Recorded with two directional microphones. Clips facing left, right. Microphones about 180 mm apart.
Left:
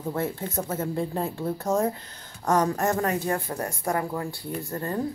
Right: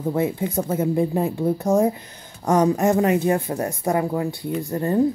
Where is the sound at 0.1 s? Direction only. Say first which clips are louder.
Right 6 dB; 15° right (ahead or behind).